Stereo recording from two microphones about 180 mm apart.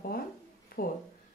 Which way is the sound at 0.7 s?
55° left (ahead or behind).